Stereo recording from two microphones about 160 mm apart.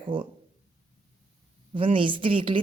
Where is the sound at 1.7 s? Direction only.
35° right (ahead or behind).